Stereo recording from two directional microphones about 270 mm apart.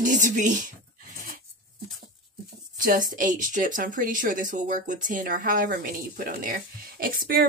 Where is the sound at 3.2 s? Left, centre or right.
Right.